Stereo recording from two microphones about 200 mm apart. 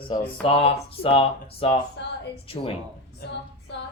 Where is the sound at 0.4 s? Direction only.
25° left (ahead or behind).